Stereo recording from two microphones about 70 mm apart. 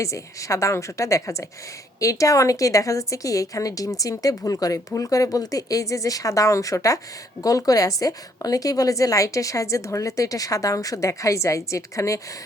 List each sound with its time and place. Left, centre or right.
0.0 s a woman's voice: left